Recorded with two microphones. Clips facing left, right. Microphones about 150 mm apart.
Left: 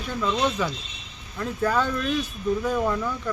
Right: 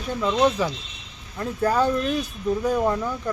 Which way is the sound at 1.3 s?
35° right (ahead or behind).